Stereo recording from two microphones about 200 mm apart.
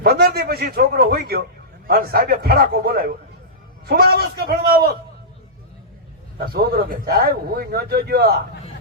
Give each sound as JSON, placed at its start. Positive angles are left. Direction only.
{"t": 0.0, "sound": "a man's voice", "side_deg": -50}
{"t": 6.4, "sound": "a man's voice", "side_deg": -50}